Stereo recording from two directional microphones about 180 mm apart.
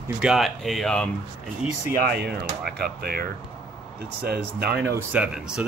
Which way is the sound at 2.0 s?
65° right (ahead or behind).